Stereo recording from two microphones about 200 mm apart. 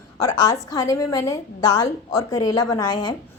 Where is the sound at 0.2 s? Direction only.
20° left (ahead or behind).